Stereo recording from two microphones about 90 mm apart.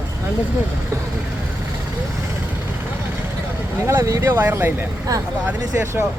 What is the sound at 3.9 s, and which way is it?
Speech, 30° right (ahead or behind).